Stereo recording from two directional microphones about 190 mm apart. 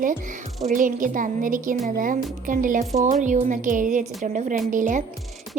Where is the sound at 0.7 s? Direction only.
45° right (ahead or behind).